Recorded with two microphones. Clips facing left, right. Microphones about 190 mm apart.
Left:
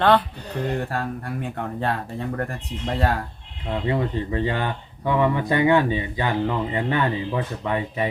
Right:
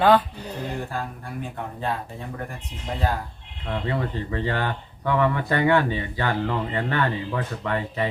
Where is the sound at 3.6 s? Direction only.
15° left (ahead or behind).